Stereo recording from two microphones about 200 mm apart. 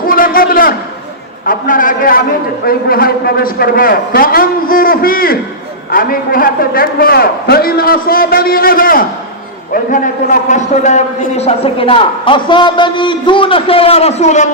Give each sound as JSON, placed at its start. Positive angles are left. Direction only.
{"t": 0.0, "sound": "a sound", "side_deg": 45}
{"t": 1.5, "sound": "a man's voice", "side_deg": 40}
{"t": 10.5, "sound": "a man's voice", "side_deg": 35}